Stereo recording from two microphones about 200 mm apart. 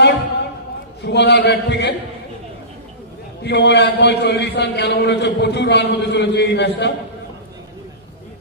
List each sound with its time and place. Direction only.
1.0 s a man's voice: 60° left (ahead or behind)
3.4 s a man's voice: 60° left (ahead or behind)